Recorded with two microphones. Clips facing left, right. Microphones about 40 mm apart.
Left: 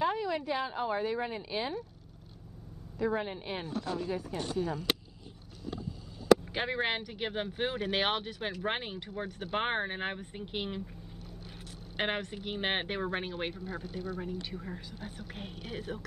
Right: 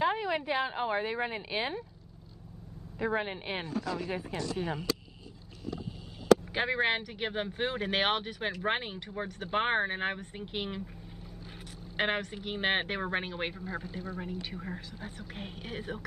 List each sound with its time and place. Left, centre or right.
0.0 s speech: right
3.0 s a woman's voice: right
3.6 s speech: right
4.4 s speech: right
6.5 s speech: centre
9.1 s speech: right
9.5 s speech: centre
12.0 s speech: centre
13.0 s speech: centre
13.6 s speech: right
14.2 s speech: centre
15.0 s speech: right
15.6 s a woman's voice: right